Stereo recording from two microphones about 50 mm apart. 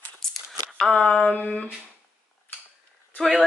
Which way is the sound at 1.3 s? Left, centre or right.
Left.